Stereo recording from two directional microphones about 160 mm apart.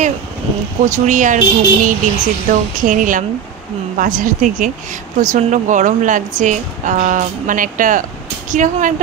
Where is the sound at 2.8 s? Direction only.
55° right (ahead or behind).